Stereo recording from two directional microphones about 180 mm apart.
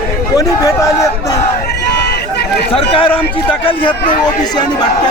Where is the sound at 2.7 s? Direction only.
30° left (ahead or behind).